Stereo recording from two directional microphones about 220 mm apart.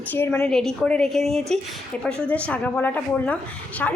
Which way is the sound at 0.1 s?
10° left (ahead or behind).